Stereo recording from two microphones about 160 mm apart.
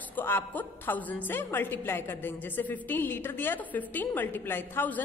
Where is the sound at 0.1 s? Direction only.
10° left (ahead or behind).